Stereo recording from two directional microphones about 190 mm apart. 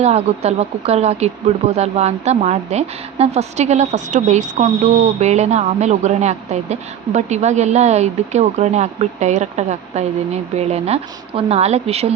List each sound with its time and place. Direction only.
0.0 s a woman's voice: 35° right (ahead or behind)